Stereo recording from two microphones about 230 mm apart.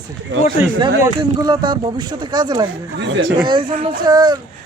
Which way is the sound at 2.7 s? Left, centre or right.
Right.